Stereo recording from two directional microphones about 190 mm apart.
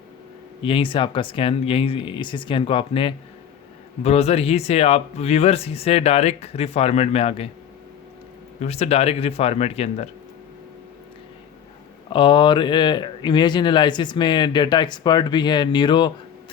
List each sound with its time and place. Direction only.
0.6 s speech: 30° left (ahead or behind)
8.6 s speech: 35° left (ahead or behind)
12.1 s speech: 25° left (ahead or behind)